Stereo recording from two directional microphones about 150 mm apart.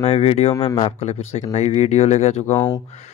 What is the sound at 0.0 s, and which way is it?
Speech, 45° left (ahead or behind).